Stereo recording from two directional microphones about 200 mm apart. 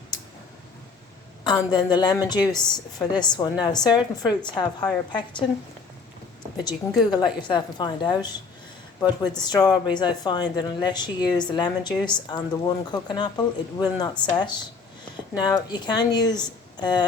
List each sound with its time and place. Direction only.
1.5 s speech: 20° left (ahead or behind)
6.7 s speech: 20° left (ahead or behind)
9.4 s speech: 20° left (ahead or behind)